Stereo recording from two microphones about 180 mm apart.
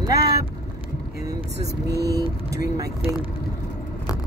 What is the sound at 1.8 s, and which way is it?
Speech, 65° right (ahead or behind).